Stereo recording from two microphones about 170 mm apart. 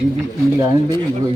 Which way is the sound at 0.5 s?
20° right (ahead or behind).